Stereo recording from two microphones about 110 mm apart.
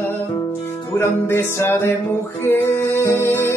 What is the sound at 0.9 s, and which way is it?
Music, 20° left (ahead or behind).